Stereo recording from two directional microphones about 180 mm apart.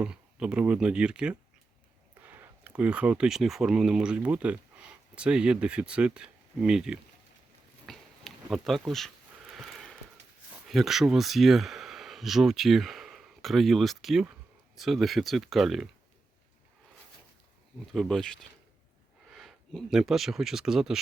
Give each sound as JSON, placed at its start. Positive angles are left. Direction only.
{"t": 0.0, "sound": "speech", "side_deg": -5}
{"t": 7.9, "sound": "a sound", "side_deg": 0}
{"t": 10.7, "sound": "speech", "side_deg": 0}
{"t": 17.9, "sound": "speech", "side_deg": 0}